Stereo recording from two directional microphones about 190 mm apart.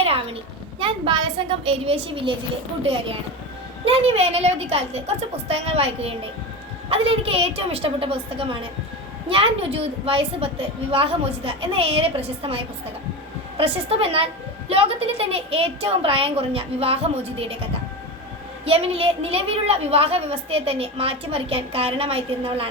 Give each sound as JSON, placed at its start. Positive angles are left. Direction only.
{"t": 0.0, "sound": "a sound", "side_deg": -30}
{"t": 0.8, "sound": "a woman's voice", "side_deg": -25}
{"t": 18.6, "sound": "a woman's voice", "side_deg": -30}